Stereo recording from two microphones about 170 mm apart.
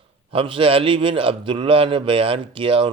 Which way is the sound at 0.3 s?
30° right (ahead or behind).